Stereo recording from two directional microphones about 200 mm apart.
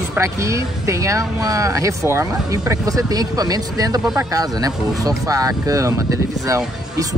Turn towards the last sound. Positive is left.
turn(degrees=-15)  # may be behind; listen again after turning